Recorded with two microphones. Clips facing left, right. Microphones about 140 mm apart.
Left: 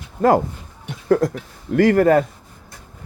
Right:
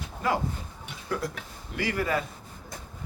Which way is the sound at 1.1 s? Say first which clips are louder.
Left 15 dB; 45° left (ahead or behind).